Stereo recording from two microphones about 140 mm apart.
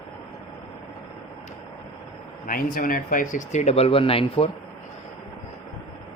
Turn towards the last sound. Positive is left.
turn(degrees=40)  # may be behind; listen again after turning